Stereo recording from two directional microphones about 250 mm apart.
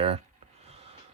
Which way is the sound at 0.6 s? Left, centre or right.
Right.